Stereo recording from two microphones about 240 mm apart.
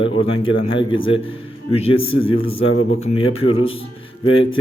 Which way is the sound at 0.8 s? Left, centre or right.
Left.